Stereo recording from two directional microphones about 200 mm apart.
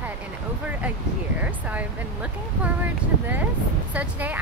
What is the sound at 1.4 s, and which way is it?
Speech, 10° right (ahead or behind).